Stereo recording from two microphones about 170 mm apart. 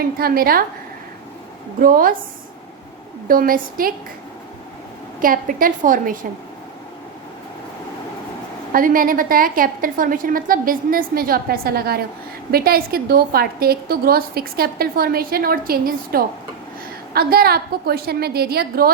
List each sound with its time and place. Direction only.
0.0 s a woman's voice: 60° right (ahead or behind)
1.8 s a woman's voice: 55° right (ahead or behind)
3.2 s a woman's voice: 55° right (ahead or behind)
5.2 s a woman's voice: 55° right (ahead or behind)
8.7 s a woman's voice: 55° right (ahead or behind)